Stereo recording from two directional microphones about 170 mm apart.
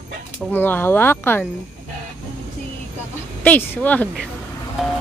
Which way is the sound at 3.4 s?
10° left (ahead or behind).